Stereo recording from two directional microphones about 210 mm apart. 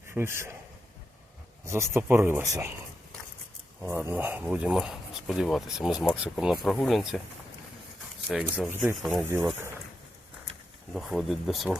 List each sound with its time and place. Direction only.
0.1 s speech: 10° right (ahead or behind)
1.6 s speech: 15° right (ahead or behind)
3.8 s speech: 10° right (ahead or behind)
8.5 s speech: 5° right (ahead or behind)
10.9 s speech: centre (ahead or behind)